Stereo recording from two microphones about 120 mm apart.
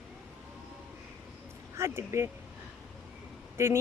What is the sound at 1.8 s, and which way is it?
Speech, 25° right (ahead or behind).